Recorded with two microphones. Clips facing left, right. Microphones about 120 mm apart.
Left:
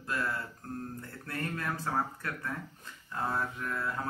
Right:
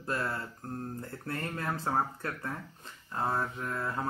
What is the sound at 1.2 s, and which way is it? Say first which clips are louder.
Speech: even; 25° right (ahead or behind).